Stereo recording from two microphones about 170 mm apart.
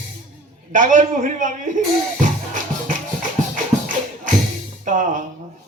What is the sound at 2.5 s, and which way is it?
Music, 50° right (ahead or behind).